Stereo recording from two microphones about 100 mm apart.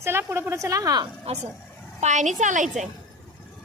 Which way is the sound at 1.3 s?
90° right.